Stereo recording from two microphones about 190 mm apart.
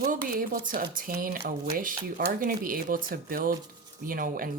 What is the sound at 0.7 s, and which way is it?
Speech, 45° right (ahead or behind).